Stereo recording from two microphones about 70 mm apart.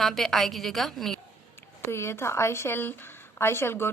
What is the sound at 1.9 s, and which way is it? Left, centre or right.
Speech, left.